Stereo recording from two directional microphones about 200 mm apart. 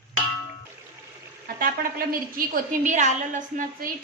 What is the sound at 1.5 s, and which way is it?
A woman's voice, 45° right (ahead or behind).